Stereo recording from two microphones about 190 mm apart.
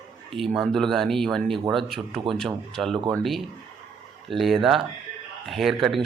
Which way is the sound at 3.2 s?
Centre (ahead or behind).